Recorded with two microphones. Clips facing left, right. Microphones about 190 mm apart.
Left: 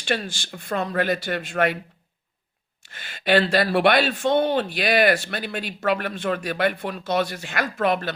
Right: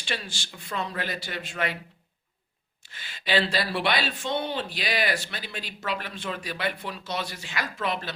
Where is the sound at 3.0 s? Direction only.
55° left (ahead or behind).